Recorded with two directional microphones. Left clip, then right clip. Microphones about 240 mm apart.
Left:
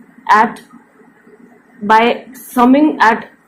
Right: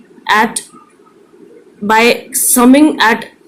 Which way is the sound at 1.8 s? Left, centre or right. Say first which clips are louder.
Right 1 dB; right.